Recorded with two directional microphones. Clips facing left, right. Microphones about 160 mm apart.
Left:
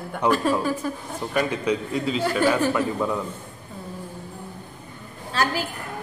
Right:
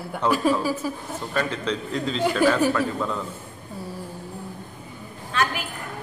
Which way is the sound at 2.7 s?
15° left (ahead or behind).